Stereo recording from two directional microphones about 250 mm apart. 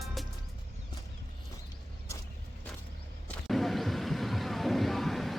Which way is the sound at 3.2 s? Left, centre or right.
Centre.